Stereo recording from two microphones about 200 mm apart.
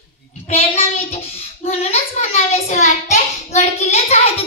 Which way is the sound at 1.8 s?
30° left (ahead or behind).